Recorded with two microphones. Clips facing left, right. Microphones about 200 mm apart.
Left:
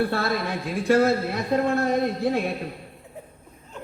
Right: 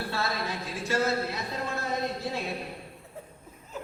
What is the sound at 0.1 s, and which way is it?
A man's voice, 55° left (ahead or behind).